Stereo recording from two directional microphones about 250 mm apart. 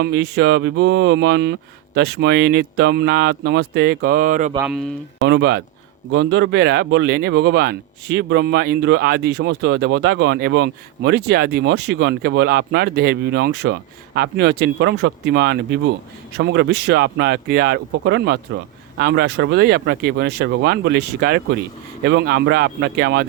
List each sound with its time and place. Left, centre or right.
0.0 s speech: right
4.5 s speech: centre
5.2 s speech: right